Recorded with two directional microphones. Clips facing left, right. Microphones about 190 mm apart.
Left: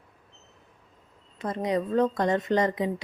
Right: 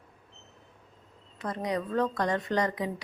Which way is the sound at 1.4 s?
25° left (ahead or behind).